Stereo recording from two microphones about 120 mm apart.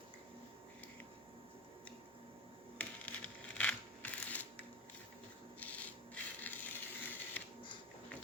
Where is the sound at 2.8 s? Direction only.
10° left (ahead or behind).